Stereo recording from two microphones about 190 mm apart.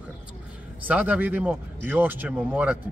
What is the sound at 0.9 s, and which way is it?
Speech, 10° right (ahead or behind).